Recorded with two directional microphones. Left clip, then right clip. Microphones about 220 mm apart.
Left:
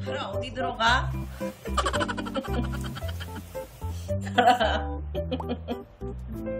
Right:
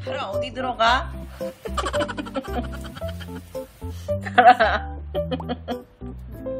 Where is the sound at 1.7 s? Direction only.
Centre (ahead or behind).